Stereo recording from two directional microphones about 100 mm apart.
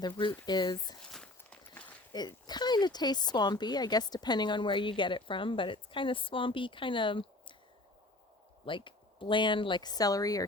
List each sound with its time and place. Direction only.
0.0 s speech: 50° left (ahead or behind)
1.1 s walk: 10° left (ahead or behind)
2.1 s speech: 45° left (ahead or behind)
8.6 s speech: 60° left (ahead or behind); by 10.4 s 35° left (ahead or behind)